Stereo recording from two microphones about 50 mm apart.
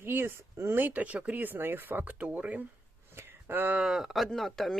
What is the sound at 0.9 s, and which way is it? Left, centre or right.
Speech, right.